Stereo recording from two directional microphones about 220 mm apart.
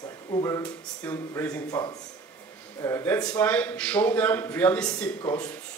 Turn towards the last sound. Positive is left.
turn(degrees=10)  # may be behind; listen again after turning